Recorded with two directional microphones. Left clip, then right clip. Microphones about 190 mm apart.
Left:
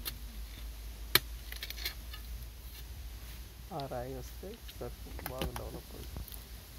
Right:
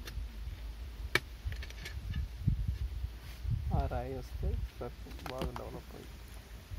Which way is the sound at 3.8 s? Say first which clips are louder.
Even; 20° right (ahead or behind).